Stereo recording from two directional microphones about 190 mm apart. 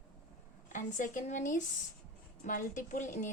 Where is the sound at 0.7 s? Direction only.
40° left (ahead or behind).